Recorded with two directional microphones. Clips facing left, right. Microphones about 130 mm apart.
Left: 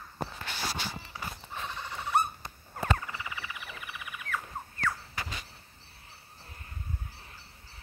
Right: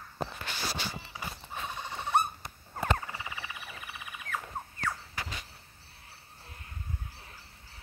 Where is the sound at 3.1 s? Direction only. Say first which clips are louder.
Left 1 dB; 25° right (ahead or behind).